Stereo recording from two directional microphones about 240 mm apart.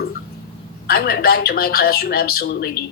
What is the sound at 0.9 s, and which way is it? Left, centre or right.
Speech, left.